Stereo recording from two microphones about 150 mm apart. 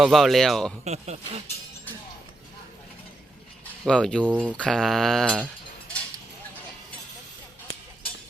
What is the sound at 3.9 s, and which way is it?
Speech, 5° left (ahead or behind).